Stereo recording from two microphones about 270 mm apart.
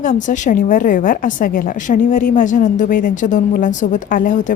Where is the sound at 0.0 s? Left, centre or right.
Left.